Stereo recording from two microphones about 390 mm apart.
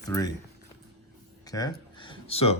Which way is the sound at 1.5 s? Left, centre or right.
Centre.